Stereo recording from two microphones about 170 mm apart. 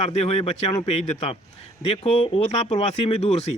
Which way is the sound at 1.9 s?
35° left (ahead or behind).